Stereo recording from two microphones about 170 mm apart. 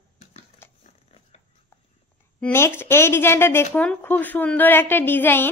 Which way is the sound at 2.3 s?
10° left (ahead or behind).